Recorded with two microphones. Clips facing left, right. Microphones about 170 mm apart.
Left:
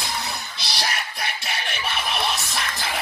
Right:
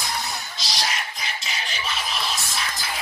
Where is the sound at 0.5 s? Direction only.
60° left (ahead or behind).